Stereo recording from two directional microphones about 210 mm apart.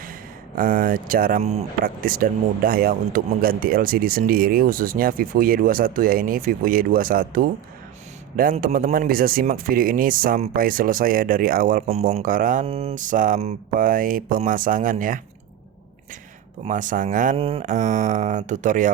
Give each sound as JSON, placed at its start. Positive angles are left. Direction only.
{"t": 0.5, "sound": "speech", "side_deg": -40}
{"t": 8.5, "sound": "speech", "side_deg": -45}
{"t": 16.6, "sound": "speech", "side_deg": -40}